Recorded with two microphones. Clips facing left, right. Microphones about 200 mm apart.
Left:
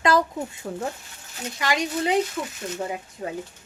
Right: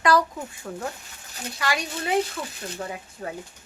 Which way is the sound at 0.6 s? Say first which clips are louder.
Left 3 dB; 30° left (ahead or behind).